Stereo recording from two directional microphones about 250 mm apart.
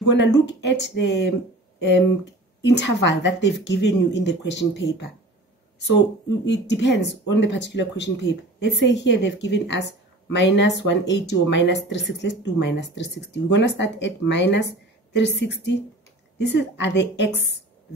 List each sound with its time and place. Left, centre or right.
0.1 s speech: left